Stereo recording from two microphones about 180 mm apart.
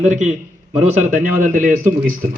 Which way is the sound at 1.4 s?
50° right (ahead or behind).